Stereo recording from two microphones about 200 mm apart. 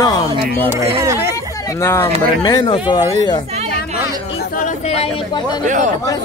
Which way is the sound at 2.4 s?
20° left (ahead or behind).